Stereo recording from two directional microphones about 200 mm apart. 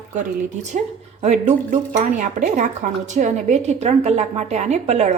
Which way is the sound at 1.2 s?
35° right (ahead or behind).